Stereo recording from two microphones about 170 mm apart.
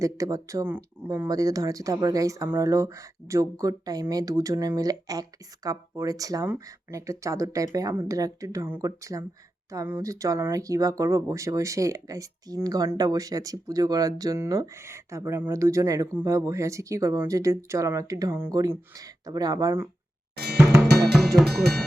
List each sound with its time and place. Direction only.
0.0 s speech: 20° right (ahead or behind)
20.3 s drum: 75° right (ahead or behind)
20.6 s music: 10° right (ahead or behind)
21.1 s drum: centre (ahead or behind)